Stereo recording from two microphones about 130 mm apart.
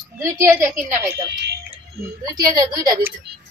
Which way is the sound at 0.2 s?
20° right (ahead or behind).